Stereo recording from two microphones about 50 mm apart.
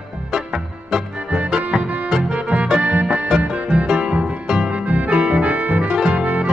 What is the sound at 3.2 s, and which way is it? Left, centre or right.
Music, centre.